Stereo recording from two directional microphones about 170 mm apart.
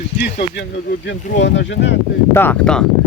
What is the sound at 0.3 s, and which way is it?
Speech, 85° left.